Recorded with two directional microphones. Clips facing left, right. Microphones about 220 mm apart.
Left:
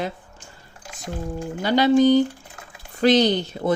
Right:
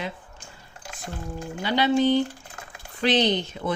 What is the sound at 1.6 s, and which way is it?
Speech, 45° left (ahead or behind).